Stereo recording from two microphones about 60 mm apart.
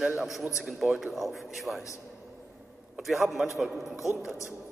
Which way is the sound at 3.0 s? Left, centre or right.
Centre.